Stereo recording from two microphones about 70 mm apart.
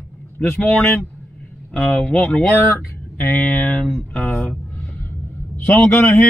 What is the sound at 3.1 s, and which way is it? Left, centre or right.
Speech, left.